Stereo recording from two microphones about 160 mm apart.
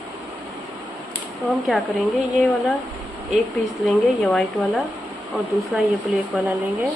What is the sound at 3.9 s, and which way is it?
Speech, 5° left (ahead or behind).